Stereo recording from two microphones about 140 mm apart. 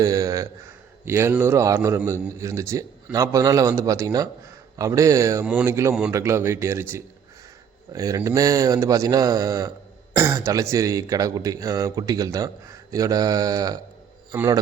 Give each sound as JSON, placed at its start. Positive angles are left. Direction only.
{"t": 0.0, "sound": "a man's voice", "side_deg": -25}